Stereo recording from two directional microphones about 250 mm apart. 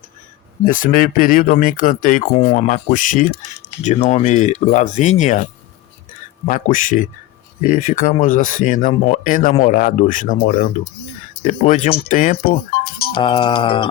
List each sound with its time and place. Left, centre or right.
0.6 s speech: left
6.5 s speech: left
13.1 s speech: centre